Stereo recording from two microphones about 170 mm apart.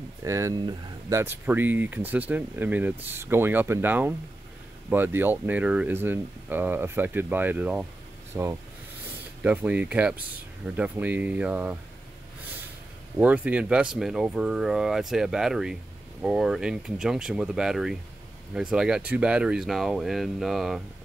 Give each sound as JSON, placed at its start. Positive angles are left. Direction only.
{"t": 0.2, "sound": "speech", "side_deg": -20}
{"t": 13.2, "sound": "speech", "side_deg": -10}